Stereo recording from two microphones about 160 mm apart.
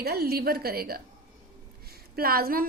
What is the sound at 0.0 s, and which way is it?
A woman's voice, 80° right.